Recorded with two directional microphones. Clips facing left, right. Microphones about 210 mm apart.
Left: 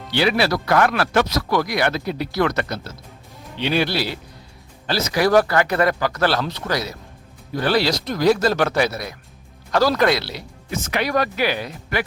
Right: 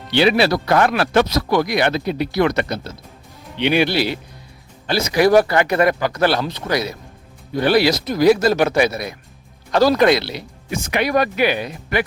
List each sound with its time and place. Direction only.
0.1 s speech: 25° right (ahead or behind)